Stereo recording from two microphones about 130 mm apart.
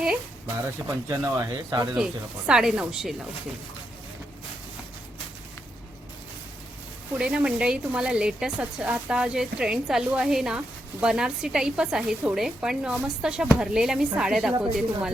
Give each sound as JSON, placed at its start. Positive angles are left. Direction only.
{"t": 0.0, "sound": "music", "side_deg": -5}
{"t": 0.8, "sound": "speech", "side_deg": -20}
{"t": 2.5, "sound": "a woman's voice", "side_deg": -5}
{"t": 7.2, "sound": "a woman's voice", "side_deg": -10}